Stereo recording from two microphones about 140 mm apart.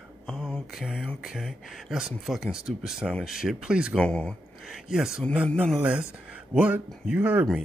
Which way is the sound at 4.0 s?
5° left (ahead or behind).